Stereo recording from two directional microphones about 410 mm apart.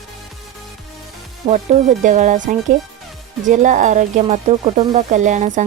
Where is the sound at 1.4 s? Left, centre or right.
Centre.